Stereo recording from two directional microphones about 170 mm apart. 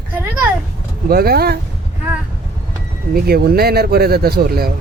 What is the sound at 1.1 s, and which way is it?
Speech, 65° right (ahead or behind).